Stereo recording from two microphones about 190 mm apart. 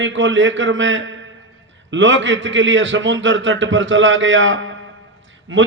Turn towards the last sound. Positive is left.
turn(degrees=-80)